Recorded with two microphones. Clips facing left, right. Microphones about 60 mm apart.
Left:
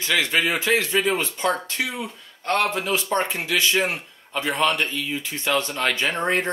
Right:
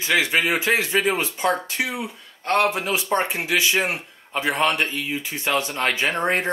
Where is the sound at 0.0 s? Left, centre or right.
Centre.